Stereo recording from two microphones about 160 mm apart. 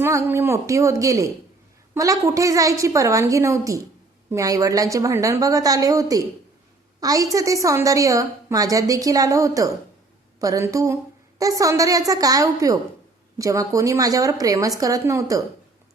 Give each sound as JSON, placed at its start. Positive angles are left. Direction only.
{"t": 0.0, "sound": "a woman's voice", "side_deg": -15}